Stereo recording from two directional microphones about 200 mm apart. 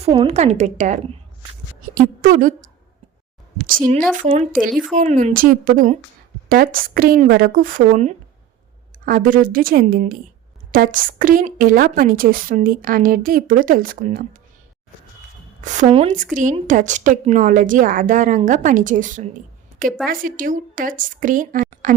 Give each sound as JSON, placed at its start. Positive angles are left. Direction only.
{"t": 0.0, "sound": "a woman's voice", "side_deg": -30}
{"t": 15.6, "sound": "a woman's voice", "side_deg": -35}
{"t": 16.1, "sound": "a woman's voice", "side_deg": -40}